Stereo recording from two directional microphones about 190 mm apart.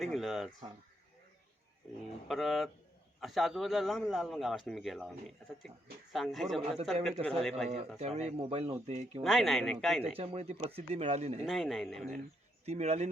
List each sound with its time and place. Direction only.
0.0 s a man's voice: centre (ahead or behind)
2.2 s a man's voice: centre (ahead or behind)
6.1 s a man's voice: centre (ahead or behind)
7.9 s speech: 35° right (ahead or behind)
9.2 s a man's voice: centre (ahead or behind)
10.0 s speech: 30° right (ahead or behind)
11.4 s a man's voice: centre (ahead or behind)
12.6 s speech: 35° right (ahead or behind)